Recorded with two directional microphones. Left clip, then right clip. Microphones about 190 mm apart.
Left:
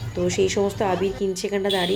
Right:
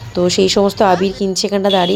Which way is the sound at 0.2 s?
40° right (ahead or behind).